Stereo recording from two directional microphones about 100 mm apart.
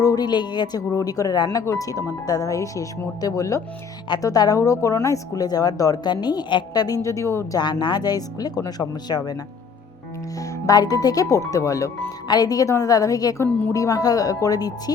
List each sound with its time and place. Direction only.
0.0 s speech: 40° left (ahead or behind)
7.6 s speech: 50° left (ahead or behind)
10.7 s speech: 40° left (ahead or behind)
13.4 s speech: 20° left (ahead or behind)
13.7 s speech: 35° left (ahead or behind)